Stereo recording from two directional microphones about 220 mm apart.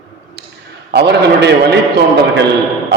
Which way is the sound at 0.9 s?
50° right (ahead or behind).